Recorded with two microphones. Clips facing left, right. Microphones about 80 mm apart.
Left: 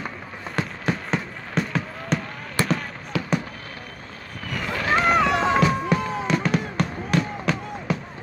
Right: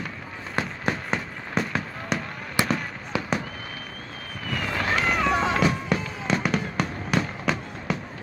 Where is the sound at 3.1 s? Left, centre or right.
Right.